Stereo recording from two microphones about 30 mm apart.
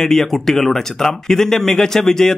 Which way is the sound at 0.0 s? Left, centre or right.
Centre.